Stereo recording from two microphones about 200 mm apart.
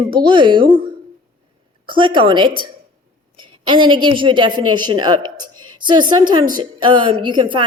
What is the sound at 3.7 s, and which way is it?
Speech, 25° right (ahead or behind).